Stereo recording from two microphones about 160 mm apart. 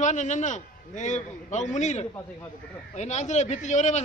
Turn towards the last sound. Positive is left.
turn(degrees=45)  # may be behind; listen again after turning